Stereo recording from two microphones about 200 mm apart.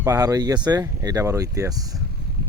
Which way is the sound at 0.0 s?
15° right (ahead or behind).